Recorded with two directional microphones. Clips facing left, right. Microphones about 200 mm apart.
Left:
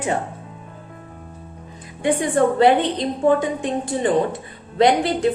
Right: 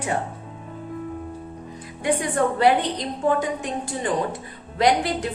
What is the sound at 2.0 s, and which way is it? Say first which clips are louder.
A woman's voice: left 4 dB; 25° left (ahead or behind).